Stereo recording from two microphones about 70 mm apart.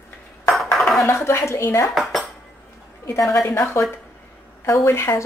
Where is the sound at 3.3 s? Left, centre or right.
Left.